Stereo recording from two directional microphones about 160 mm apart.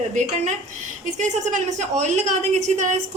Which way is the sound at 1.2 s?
50° right (ahead or behind).